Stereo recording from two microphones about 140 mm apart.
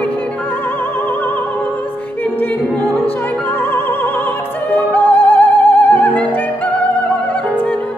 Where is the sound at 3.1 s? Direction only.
10° left (ahead or behind).